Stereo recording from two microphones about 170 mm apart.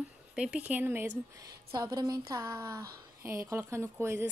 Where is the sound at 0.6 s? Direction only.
10° right (ahead or behind).